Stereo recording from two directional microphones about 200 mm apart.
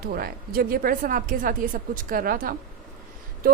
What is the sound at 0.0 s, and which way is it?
A woman's voice, 50° right (ahead or behind).